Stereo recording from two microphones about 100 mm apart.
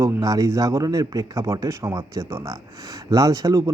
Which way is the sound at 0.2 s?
40° right (ahead or behind).